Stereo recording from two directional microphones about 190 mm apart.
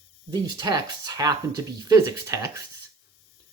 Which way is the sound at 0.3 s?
20° right (ahead or behind).